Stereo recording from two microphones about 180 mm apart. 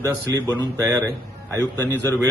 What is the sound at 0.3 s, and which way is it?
Speech, 20° right (ahead or behind).